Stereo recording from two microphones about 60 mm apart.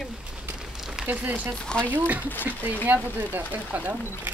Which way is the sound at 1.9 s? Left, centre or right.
Right.